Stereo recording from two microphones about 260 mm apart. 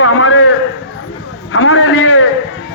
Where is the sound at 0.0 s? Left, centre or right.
Left.